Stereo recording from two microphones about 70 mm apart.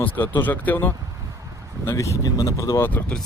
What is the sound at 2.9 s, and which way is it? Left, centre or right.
Speech, left.